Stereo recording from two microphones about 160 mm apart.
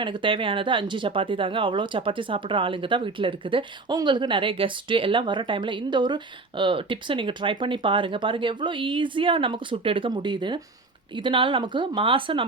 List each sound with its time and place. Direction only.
0.0 s speech: 30° right (ahead or behind)